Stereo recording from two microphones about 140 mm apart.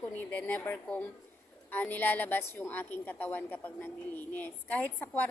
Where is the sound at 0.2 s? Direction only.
10° left (ahead or behind).